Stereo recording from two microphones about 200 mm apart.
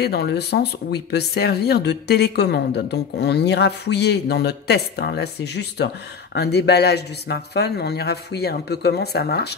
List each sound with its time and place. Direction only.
0.0 s speech: 55° left (ahead or behind)